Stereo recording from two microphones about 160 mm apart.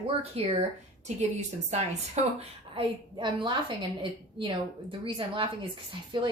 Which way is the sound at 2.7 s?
30° right (ahead or behind).